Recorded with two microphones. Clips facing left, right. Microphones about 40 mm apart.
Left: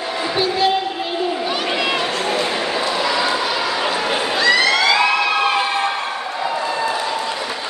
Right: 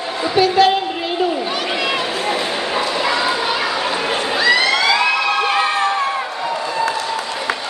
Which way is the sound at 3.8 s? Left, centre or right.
Centre.